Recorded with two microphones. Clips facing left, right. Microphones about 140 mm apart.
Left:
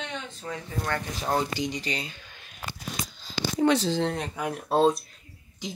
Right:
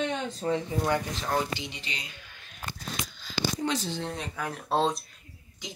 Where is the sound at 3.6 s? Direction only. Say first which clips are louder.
Left 8 dB; 80° left.